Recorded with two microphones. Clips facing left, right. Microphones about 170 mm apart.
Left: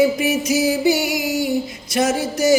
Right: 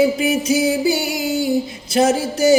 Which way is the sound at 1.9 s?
30° right (ahead or behind).